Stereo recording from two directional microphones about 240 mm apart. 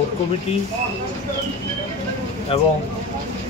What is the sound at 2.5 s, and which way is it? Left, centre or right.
Speech, left.